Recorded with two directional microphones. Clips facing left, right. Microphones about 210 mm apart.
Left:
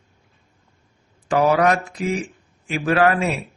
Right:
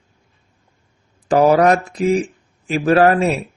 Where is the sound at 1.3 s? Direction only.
35° right (ahead or behind).